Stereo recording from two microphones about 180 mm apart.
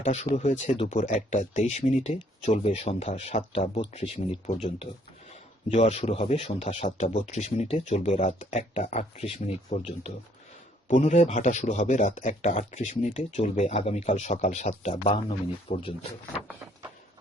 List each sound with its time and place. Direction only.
0.3 s speech: 20° left (ahead or behind)
0.7 s speech: 35° left (ahead or behind)
10.8 s speech: 45° left (ahead or behind)